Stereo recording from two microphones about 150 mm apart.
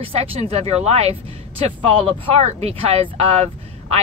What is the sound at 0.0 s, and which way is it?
Speech, 40° right (ahead or behind).